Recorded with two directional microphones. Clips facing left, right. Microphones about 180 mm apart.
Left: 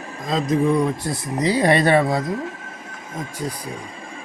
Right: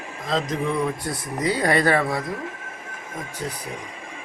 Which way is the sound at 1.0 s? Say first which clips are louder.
Left 3 dB; 25° left (ahead or behind).